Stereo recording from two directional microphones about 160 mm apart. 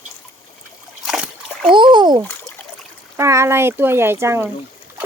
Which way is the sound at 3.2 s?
20° right (ahead or behind).